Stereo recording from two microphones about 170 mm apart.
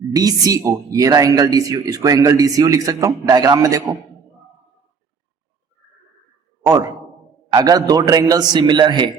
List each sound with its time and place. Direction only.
0.1 s speech: 20° right (ahead or behind)
6.7 s speech: 20° right (ahead or behind)